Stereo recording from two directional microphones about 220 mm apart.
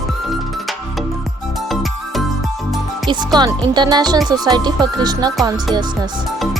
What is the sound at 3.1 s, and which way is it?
Speech, 20° right (ahead or behind).